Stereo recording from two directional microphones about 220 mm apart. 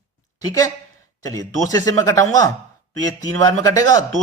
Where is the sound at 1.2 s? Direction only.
15° left (ahead or behind).